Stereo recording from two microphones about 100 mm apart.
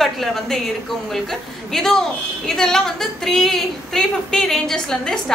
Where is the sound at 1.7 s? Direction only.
Centre (ahead or behind).